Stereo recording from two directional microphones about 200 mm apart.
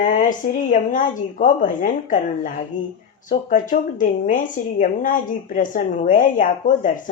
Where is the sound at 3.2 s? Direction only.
40° left (ahead or behind).